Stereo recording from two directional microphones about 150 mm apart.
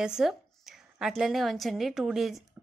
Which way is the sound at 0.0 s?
5° right (ahead or behind).